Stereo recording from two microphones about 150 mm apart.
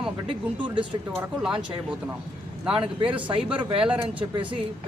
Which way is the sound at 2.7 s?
35° right (ahead or behind).